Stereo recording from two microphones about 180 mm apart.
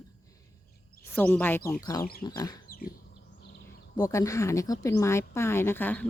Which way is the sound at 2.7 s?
55° left (ahead or behind).